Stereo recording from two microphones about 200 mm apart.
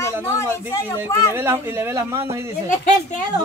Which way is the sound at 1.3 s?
10° right (ahead or behind).